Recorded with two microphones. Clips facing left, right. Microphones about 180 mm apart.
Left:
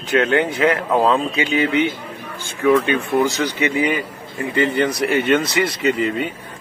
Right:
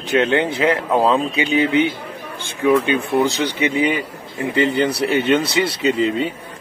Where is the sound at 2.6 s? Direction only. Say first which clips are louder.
Even; 15° right (ahead or behind).